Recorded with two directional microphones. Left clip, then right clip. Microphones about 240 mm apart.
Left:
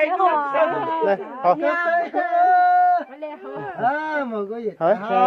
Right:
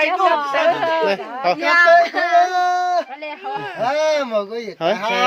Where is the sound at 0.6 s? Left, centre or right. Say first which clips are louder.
Right 5 dB; right.